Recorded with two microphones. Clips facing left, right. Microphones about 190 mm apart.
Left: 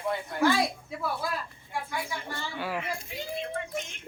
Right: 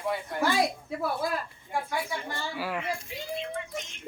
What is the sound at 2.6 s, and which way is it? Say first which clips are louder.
Speech: left 1 dB; centre (ahead or behind).